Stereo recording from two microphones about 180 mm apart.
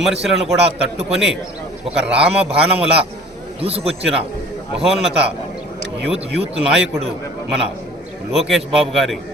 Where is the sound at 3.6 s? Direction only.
35° right (ahead or behind).